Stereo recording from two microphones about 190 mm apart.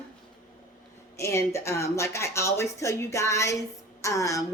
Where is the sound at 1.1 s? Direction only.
15° left (ahead or behind).